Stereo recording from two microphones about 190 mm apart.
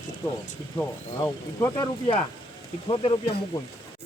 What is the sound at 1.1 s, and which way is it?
Speech, 15° left (ahead or behind).